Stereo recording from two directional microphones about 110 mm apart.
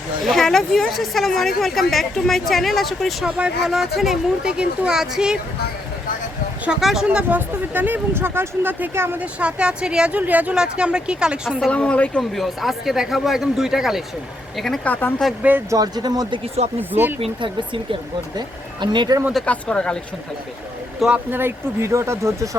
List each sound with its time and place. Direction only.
0.3 s speech: centre (ahead or behind)
6.7 s speech: 5° right (ahead or behind)
11.7 s speech: 10° left (ahead or behind)
14.8 s speech: 15° left (ahead or behind)
15.4 s speech: 15° right (ahead or behind)
15.7 s speech: 35° right (ahead or behind)
16.9 s speech: 20° right (ahead or behind)
17.2 s speech: 60° right (ahead or behind)
18.3 s speech: 45° right (ahead or behind)
19.5 s speech: 10° left (ahead or behind)
21.2 s speech: 20° right (ahead or behind)